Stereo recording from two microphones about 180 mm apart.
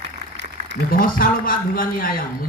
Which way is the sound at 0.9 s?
55° left (ahead or behind).